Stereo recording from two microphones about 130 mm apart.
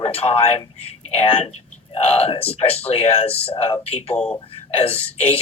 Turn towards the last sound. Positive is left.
turn(degrees=50)  # may be behind; listen again after turning